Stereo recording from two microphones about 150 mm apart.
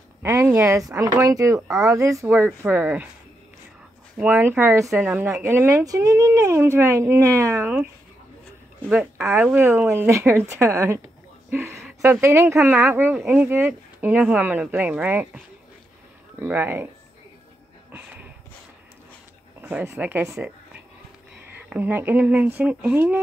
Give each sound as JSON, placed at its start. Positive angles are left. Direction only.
{"t": 0.2, "sound": "speech", "side_deg": -15}
{"t": 4.2, "sound": "speech", "side_deg": -15}
{"t": 8.8, "sound": "speech", "side_deg": -10}
{"t": 17.9, "sound": "a sound", "side_deg": -10}
{"t": 19.6, "sound": "speech", "side_deg": -15}
{"t": 21.5, "sound": "speech", "side_deg": -10}